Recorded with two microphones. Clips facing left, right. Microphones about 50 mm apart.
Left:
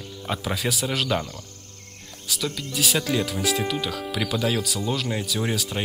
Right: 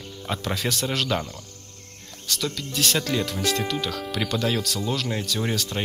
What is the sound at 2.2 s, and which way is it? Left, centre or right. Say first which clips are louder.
Speech: even; centre.